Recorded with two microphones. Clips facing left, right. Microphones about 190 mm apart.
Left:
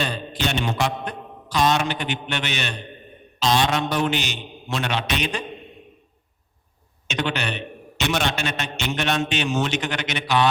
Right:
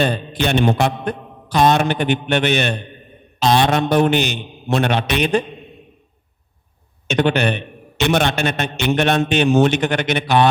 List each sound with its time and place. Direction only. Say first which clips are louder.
0.0 s a man's voice: right 7 dB; 55° right (ahead or behind)
7.1 s a man's voice: right 9 dB; 55° right (ahead or behind)